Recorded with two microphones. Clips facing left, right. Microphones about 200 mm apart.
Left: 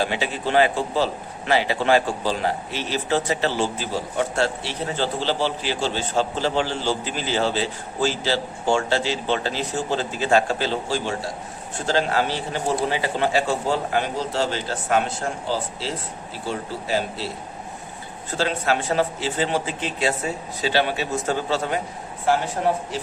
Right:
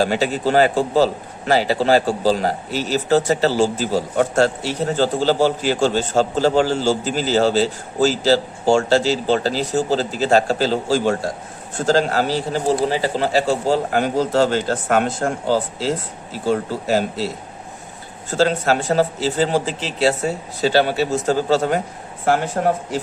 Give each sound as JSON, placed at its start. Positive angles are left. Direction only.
{"t": 0.0, "sound": "a man's voice", "side_deg": -40}
{"t": 18.3, "sound": "a man's voice", "side_deg": -40}
{"t": 22.6, "sound": "speech", "side_deg": -55}